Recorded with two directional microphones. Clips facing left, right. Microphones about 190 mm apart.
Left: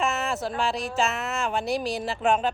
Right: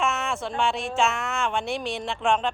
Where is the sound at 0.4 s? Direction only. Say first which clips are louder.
Right 1 dB; centre (ahead or behind).